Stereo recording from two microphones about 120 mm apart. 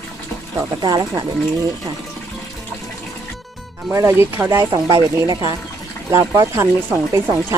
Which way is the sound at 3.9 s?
20° right (ahead or behind).